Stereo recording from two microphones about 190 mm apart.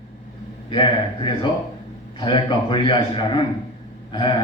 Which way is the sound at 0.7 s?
25° left (ahead or behind).